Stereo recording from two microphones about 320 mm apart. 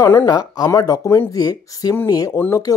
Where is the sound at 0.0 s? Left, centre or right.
Centre.